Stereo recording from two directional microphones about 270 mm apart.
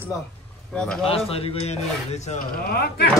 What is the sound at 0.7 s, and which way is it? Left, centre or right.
Speech, centre.